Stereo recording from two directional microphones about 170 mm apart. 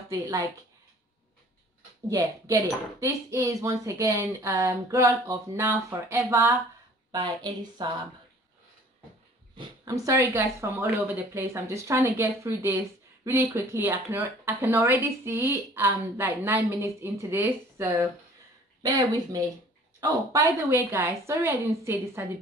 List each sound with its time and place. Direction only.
0.1 s speech: 20° right (ahead or behind)
2.0 s speech: 20° right (ahead or behind)
9.6 s speech: 20° right (ahead or behind)